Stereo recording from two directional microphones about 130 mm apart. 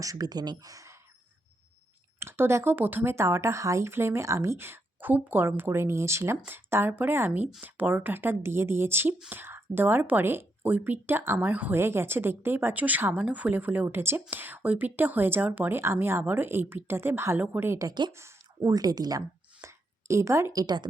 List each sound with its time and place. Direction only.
0.0 s speech: 30° right (ahead or behind)
2.1 s speech: 20° right (ahead or behind)
18.1 s speech: 20° right (ahead or behind)